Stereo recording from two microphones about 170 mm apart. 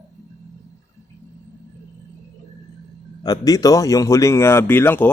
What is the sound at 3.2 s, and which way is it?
Speech, 20° left (ahead or behind).